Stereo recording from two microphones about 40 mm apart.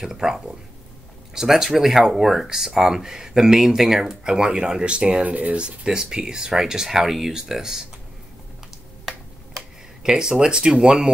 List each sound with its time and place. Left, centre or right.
0.0 s speech: centre
5.2 s speech: right
5.9 s speech: centre
9.6 s speech: centre